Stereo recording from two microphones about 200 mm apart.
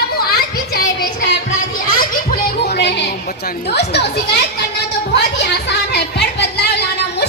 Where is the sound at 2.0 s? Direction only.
50° left (ahead or behind).